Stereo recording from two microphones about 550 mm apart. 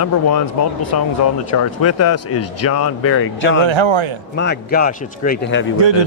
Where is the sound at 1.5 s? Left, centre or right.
Left.